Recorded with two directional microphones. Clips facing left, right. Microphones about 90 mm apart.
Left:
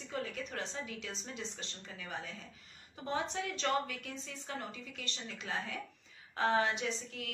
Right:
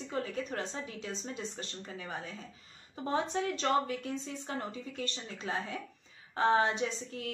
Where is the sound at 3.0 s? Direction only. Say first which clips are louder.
Right 5 dB; 35° right (ahead or behind).